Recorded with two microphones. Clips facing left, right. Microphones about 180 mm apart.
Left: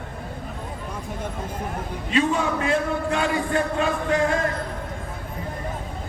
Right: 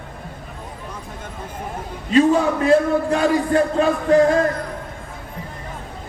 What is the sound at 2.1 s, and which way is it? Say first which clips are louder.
A man's voice: right 7 dB; 35° right (ahead or behind).